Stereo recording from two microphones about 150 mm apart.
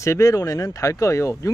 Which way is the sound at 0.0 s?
20° left (ahead or behind).